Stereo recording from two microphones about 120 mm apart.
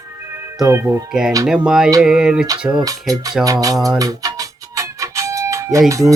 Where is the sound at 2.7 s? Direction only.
30° right (ahead or behind).